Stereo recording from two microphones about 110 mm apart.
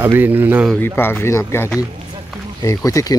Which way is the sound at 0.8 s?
20° left (ahead or behind).